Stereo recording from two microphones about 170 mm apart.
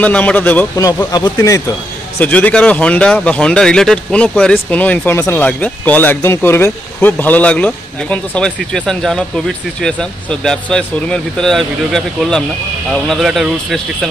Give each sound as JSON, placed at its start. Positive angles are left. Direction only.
{"t": 0.0, "sound": "speech", "side_deg": 10}
{"t": 1.1, "sound": "speech", "side_deg": 20}
{"t": 2.1, "sound": "speech", "side_deg": 10}